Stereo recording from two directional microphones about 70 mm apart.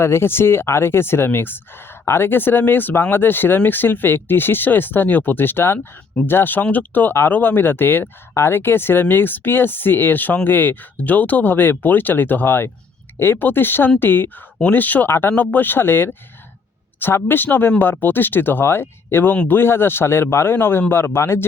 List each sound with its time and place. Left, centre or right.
0.0 s speech: left